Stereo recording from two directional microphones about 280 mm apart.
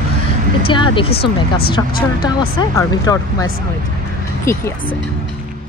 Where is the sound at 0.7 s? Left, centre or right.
Centre.